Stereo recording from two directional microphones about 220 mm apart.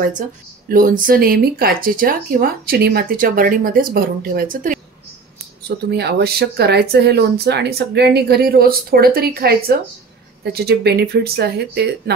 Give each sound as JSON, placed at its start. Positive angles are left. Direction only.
{"t": 0.7, "sound": "speech", "side_deg": -40}
{"t": 5.9, "sound": "speech", "side_deg": -45}